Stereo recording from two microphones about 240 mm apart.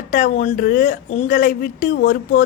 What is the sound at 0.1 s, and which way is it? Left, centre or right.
Speech, left.